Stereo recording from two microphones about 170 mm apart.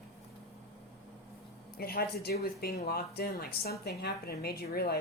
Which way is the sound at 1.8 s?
65° left (ahead or behind).